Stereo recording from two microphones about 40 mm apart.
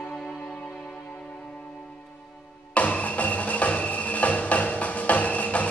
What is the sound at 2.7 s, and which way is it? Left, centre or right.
Music, left.